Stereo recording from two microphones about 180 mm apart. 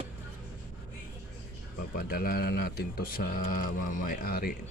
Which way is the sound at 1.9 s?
55° left (ahead or behind).